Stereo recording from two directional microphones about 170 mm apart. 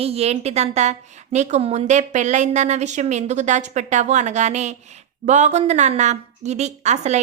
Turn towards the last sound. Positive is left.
turn(degrees=-40)  # may be behind; listen again after turning